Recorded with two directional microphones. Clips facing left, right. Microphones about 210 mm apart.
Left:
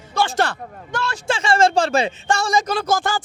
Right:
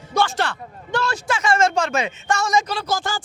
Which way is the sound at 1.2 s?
30° left (ahead or behind).